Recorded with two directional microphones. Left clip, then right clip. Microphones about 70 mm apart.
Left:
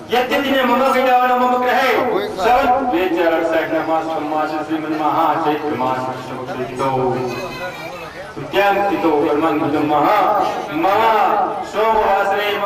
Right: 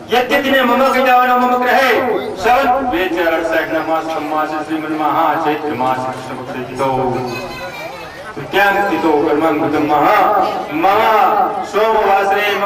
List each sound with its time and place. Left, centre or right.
0.1 s a man's voice: right
8.5 s a man's voice: right